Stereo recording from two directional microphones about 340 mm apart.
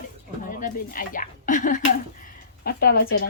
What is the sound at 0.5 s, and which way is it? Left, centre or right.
A woman's voice, left.